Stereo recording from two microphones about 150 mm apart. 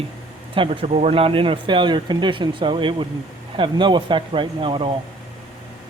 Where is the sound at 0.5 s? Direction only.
35° right (ahead or behind).